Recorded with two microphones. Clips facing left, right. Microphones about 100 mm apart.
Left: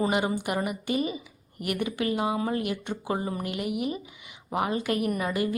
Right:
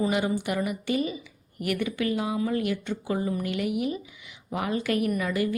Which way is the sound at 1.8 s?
20° left (ahead or behind).